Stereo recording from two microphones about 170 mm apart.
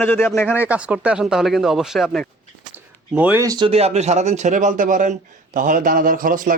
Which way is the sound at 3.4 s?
30° right (ahead or behind).